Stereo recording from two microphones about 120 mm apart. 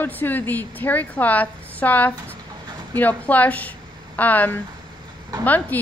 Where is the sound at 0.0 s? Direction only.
15° left (ahead or behind).